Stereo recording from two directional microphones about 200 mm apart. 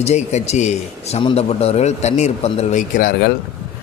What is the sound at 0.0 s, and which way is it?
Speech, 35° left (ahead or behind).